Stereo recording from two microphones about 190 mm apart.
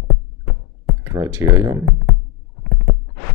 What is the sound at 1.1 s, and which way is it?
Speech, 15° right (ahead or behind).